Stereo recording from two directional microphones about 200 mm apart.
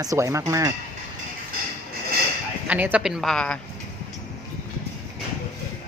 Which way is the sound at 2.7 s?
10° right (ahead or behind).